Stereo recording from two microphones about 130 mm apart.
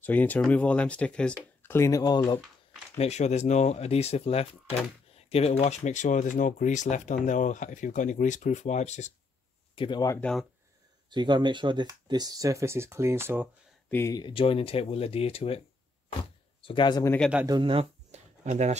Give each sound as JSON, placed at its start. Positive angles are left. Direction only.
{"t": 0.0, "sound": "speech", "side_deg": 15}
{"t": 1.6, "sound": "speech", "side_deg": 20}
{"t": 3.0, "sound": "speech", "side_deg": 60}
{"t": 9.8, "sound": "speech", "side_deg": 35}
{"t": 11.1, "sound": "speech", "side_deg": -35}
{"t": 13.8, "sound": "speech", "side_deg": 20}
{"t": 14.1, "sound": "speech", "side_deg": 40}
{"t": 16.6, "sound": "speech", "side_deg": 40}
{"t": 17.5, "sound": "speech", "side_deg": -40}
{"t": 18.1, "sound": "a sound", "side_deg": -60}